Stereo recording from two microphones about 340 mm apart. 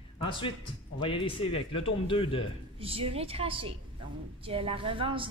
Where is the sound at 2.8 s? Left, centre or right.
Centre.